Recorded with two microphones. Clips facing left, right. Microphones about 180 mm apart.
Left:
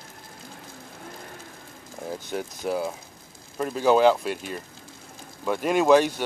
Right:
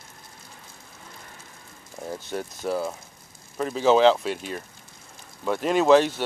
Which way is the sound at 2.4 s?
5° left (ahead or behind).